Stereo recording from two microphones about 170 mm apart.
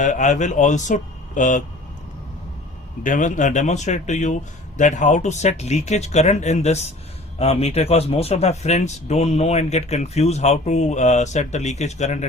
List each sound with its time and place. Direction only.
0.0 s speech: 45° left (ahead or behind)
3.0 s speech: 50° left (ahead or behind)